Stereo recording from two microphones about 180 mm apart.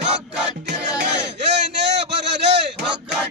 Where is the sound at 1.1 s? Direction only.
70° right (ahead or behind).